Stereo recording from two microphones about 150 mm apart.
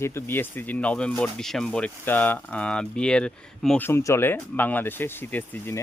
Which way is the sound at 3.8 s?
20° left (ahead or behind).